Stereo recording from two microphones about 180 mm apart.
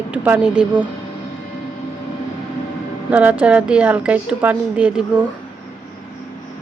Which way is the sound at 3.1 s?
10° right (ahead or behind).